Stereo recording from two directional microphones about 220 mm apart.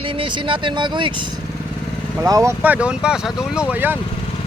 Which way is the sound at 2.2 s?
15° right (ahead or behind).